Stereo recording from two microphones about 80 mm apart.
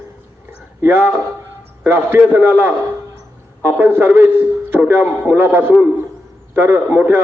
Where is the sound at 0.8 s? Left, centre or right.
Right.